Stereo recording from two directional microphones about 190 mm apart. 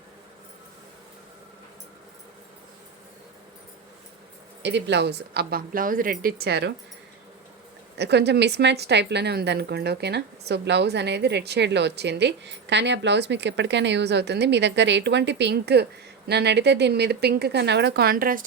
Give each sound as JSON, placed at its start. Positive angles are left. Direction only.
{"t": 4.6, "sound": "speech", "side_deg": -65}
{"t": 7.9, "sound": "speech", "side_deg": -65}